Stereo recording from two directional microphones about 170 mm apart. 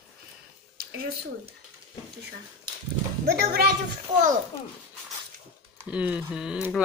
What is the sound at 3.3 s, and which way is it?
Speech, 65° right (ahead or behind).